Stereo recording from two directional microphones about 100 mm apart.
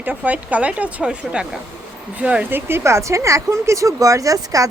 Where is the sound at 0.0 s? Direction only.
15° right (ahead or behind).